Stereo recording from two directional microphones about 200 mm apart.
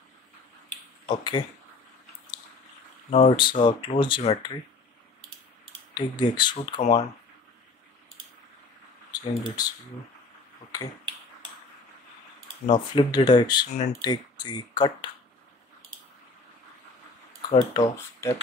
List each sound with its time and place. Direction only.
1.0 s speech: 25° left (ahead or behind)
3.1 s speech: 30° left (ahead or behind)
5.9 s speech: 20° left (ahead or behind)
9.1 s speech: 20° left (ahead or behind)
12.7 s speech: 20° left (ahead or behind)
13.7 s speech: 35° left (ahead or behind)
14.0 s speech: 20° left (ahead or behind)
17.5 s speech: 30° left (ahead or behind)
17.8 s speech: 15° left (ahead or behind)